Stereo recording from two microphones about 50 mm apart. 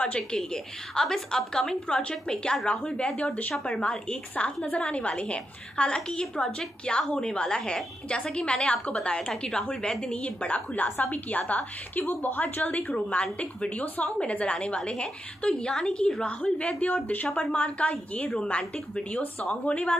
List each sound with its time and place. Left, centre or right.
0.0 s a woman's voice: left
0.4 s a woman's voice: centre; by 17.3 s left
17.3 s a woman's voice: left
18.6 s a woman's voice: centre
19.5 s a woman's voice: left